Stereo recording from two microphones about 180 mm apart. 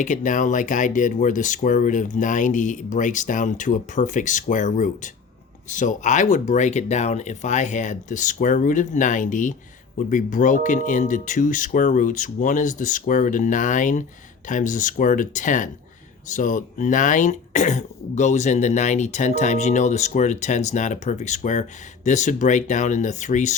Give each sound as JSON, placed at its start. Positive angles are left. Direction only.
{"t": 0.0, "sound": "speech", "side_deg": 45}